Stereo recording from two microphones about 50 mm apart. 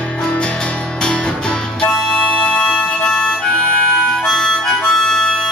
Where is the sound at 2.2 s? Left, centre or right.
Left.